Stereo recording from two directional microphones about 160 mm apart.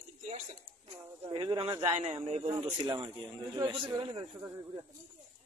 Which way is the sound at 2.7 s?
25° right (ahead or behind).